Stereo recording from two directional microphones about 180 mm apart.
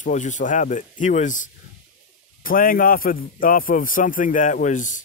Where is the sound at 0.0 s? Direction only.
45° left (ahead or behind).